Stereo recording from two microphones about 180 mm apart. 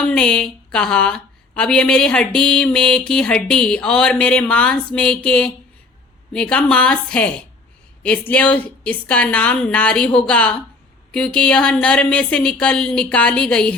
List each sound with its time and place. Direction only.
0.0 s a woman's voice: 5° left (ahead or behind)